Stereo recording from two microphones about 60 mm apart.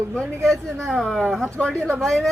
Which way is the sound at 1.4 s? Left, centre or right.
Centre.